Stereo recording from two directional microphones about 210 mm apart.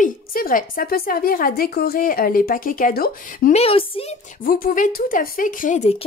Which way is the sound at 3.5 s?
30° left (ahead or behind).